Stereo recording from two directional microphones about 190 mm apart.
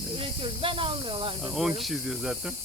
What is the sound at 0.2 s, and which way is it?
Snake, 30° right (ahead or behind).